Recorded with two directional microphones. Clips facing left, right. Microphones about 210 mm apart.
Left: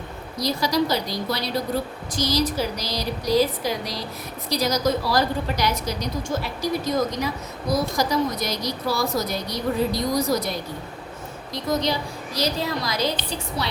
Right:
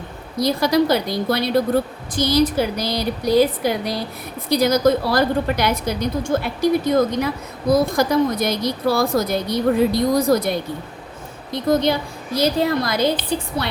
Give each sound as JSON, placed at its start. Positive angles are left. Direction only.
{"t": 0.3, "sound": "a woman's voice", "side_deg": -55}